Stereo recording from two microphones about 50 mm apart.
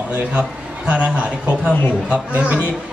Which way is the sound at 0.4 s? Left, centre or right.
Right.